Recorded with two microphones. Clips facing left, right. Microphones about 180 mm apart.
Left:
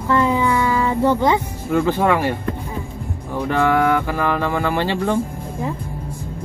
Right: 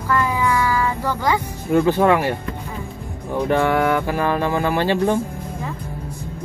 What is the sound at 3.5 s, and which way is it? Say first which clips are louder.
Speech: left 1 dB; 20° right (ahead or behind).